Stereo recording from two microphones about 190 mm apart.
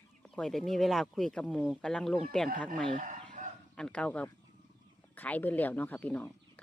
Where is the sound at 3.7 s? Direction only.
5° left (ahead or behind).